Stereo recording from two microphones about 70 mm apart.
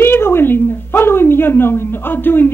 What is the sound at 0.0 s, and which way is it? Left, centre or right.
Speech, left.